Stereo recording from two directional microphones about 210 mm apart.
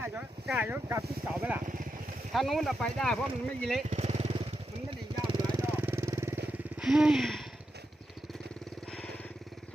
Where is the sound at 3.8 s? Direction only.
35° right (ahead or behind).